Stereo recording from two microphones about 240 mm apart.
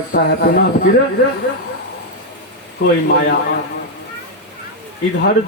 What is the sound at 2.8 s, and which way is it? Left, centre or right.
Speech, left.